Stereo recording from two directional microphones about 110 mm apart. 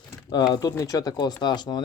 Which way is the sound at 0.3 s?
40° left (ahead or behind).